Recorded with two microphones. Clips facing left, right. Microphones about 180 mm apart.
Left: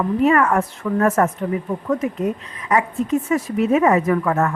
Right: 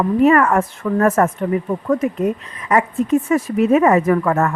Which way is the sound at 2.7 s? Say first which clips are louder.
Right 3 dB; 50° right (ahead or behind).